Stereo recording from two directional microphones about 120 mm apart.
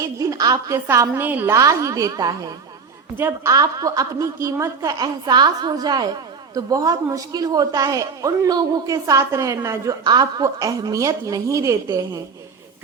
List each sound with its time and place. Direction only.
0.0 s a sound: 25° right (ahead or behind)
0.9 s a woman's voice: 20° right (ahead or behind)
3.2 s a woman's voice: 15° right (ahead or behind)
3.5 s a woman's voice: 30° right (ahead or behind)
10.0 s a woman's voice: 35° right (ahead or behind)